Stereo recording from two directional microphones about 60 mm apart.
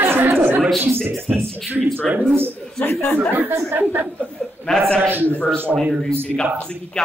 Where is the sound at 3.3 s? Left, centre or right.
Right.